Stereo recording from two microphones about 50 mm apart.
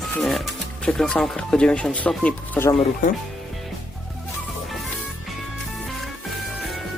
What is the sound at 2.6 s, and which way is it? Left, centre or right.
Speech, left.